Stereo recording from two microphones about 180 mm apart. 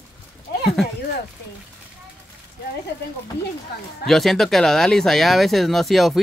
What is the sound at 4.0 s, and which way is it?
Speech, centre (ahead or behind).